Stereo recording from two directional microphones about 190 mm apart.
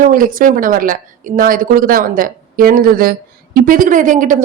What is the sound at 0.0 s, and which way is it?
Speech, 45° right (ahead or behind).